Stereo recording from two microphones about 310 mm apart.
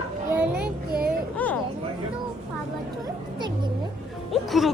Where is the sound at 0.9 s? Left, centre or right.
Right.